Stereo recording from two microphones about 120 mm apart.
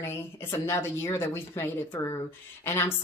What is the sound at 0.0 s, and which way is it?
Speech, 20° left (ahead or behind).